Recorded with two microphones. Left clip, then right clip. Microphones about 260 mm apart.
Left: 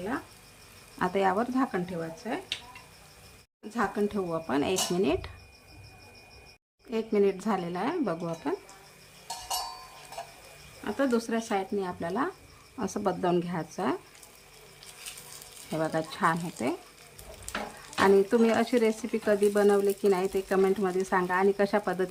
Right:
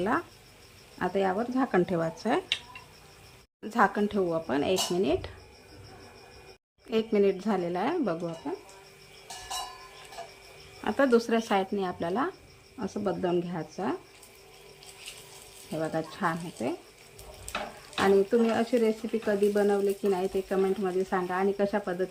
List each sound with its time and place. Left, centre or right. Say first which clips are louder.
0.9 s speech: left 2 dB; centre
3.7 s speech: right 4 dB; centre
6.9 s speech: right 1 dB; centre
10.8 s speech: right 4 dB; centre
15.8 s speech: left 3 dB; centre
18.0 s speech: left 1 dB; centre